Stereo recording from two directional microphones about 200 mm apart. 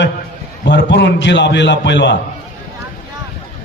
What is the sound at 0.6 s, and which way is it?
A man's voice, 60° left (ahead or behind).